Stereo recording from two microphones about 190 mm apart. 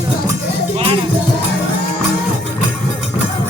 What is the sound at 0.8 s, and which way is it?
Music, 30° right (ahead or behind).